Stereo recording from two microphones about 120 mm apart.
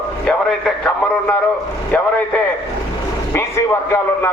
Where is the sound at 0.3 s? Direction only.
5° left (ahead or behind).